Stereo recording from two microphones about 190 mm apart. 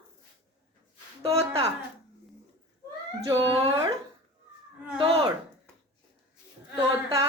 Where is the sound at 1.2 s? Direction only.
15° right (ahead or behind).